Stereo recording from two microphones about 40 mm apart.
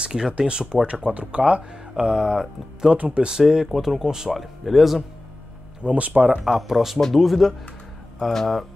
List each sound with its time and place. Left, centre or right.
0.0 s speech: centre
1.0 s speech: right
1.4 s speech: right
3.6 s speech: centre
4.0 s speech: centre
4.3 s speech: centre
5.8 s speech: right
6.4 s speech: centre